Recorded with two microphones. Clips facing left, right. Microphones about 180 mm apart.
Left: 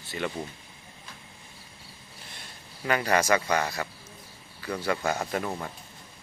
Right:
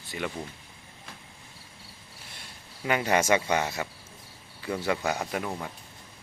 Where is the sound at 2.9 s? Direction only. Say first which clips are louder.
Even; 20° right (ahead or behind).